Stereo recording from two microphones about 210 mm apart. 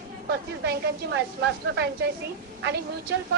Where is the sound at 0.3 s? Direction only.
50° right (ahead or behind).